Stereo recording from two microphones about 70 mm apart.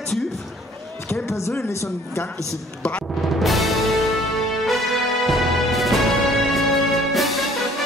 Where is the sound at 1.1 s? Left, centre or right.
Left.